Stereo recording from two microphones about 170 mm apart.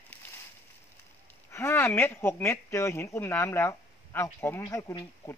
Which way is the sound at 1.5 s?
15° left (ahead or behind).